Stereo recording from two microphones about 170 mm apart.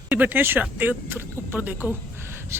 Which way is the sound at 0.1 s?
10° right (ahead or behind).